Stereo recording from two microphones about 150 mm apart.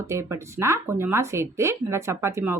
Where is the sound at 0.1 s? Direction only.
20° right (ahead or behind).